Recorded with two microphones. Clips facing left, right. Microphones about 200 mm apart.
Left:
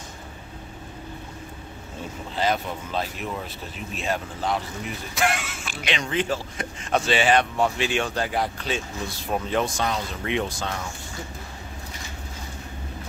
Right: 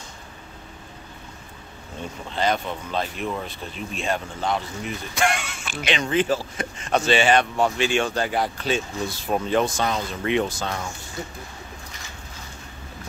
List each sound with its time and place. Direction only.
2.3 s speech: 5° left (ahead or behind)